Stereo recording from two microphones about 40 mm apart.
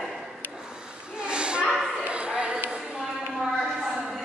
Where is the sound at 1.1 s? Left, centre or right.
Right.